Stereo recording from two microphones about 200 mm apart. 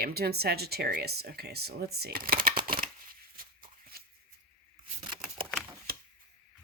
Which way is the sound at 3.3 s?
45° right (ahead or behind).